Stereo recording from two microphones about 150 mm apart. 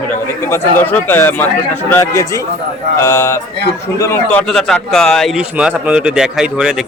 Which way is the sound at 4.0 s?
15° left (ahead or behind).